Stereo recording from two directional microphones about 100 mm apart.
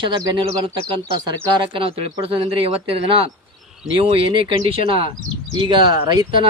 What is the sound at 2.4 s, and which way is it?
Speech, 70° right (ahead or behind).